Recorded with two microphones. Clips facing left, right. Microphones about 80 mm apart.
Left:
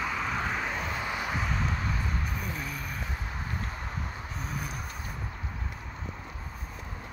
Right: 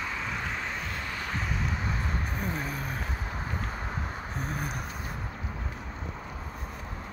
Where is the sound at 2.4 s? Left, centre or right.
Right.